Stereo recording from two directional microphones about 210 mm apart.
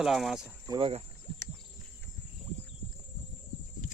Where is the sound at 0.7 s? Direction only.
25° right (ahead or behind).